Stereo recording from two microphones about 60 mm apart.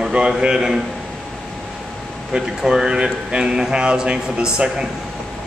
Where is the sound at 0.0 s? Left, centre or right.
Centre.